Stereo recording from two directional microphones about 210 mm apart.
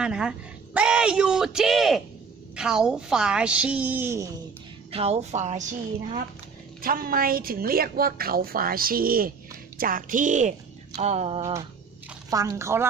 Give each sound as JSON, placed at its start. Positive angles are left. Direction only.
{"t": 0.0, "sound": "a woman's voice", "side_deg": -5}
{"t": 4.9, "sound": "a woman's voice", "side_deg": -30}
{"t": 12.3, "sound": "a woman's voice", "side_deg": -15}